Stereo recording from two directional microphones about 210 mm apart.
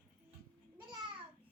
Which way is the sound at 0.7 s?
20° right (ahead or behind).